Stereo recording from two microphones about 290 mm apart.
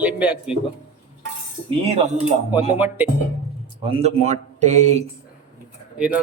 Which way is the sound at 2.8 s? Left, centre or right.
Centre.